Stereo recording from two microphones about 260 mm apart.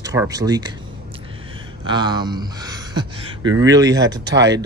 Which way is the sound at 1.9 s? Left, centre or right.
Centre.